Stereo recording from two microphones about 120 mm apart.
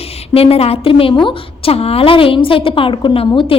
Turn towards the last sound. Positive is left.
turn(degrees=45)  # may be behind; listen again after turning